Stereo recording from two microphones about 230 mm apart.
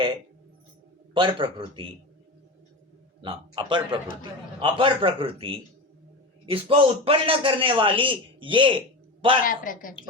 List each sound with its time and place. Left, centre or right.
1.1 s a man's voice: right
3.2 s a man's voice: right
9.4 s a man's voice: left